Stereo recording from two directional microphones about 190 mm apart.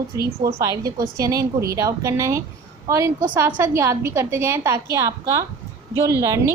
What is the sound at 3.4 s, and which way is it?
A woman's voice, 15° right (ahead or behind).